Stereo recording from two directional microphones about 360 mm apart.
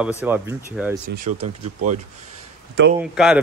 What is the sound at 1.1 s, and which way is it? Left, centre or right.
Speech, right.